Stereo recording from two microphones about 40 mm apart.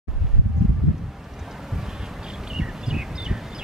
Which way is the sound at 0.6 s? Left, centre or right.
Centre.